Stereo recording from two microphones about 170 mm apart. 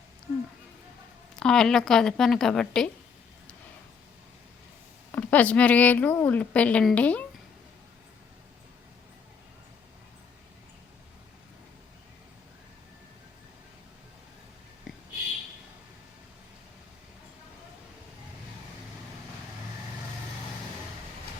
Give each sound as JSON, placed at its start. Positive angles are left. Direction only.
{"t": 1.4, "sound": "a woman's voice", "side_deg": 5}
{"t": 5.1, "sound": "speech", "side_deg": 10}
{"t": 14.9, "sound": "a sound", "side_deg": 0}